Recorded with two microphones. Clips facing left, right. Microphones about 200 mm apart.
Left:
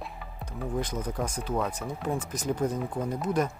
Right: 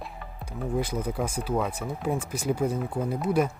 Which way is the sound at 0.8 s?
10° right (ahead or behind).